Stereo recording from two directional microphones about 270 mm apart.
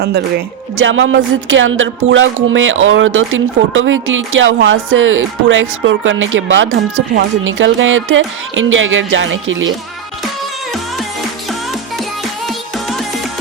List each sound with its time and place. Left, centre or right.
0.0 s speech: right
12.5 s music: centre